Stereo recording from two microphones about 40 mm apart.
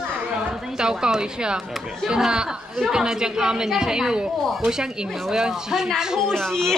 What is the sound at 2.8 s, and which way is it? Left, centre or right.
Speech, centre.